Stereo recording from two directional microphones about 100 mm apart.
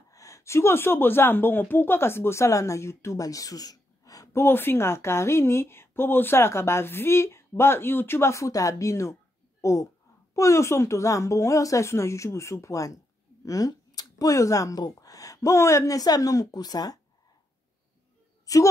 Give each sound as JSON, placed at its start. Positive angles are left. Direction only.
{"t": 0.1, "sound": "speech", "side_deg": 30}
{"t": 4.4, "sound": "a woman's voice", "side_deg": 20}
{"t": 18.4, "sound": "a sound", "side_deg": 35}